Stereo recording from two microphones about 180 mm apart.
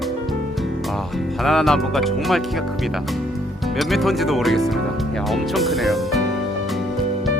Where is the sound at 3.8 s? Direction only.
Centre (ahead or behind).